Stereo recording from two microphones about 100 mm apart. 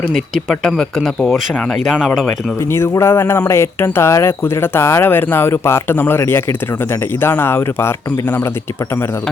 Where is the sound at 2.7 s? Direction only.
25° left (ahead or behind).